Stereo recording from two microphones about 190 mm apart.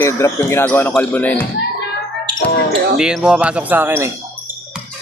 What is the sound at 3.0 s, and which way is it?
Speech, 5° right (ahead or behind).